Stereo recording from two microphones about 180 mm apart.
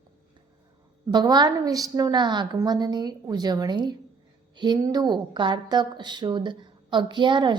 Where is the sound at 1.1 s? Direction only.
25° right (ahead or behind).